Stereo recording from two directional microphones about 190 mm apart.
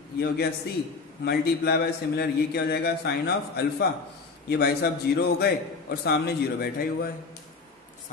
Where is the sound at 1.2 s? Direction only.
60° left (ahead or behind).